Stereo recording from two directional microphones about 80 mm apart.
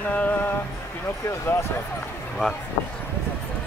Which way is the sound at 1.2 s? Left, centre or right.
Left.